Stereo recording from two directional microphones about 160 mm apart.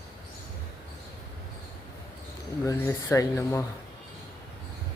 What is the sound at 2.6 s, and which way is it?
Speech, 15° left (ahead or behind).